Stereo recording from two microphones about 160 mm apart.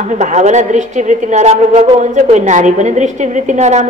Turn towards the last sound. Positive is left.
turn(degrees=-45)  # may be behind; listen again after turning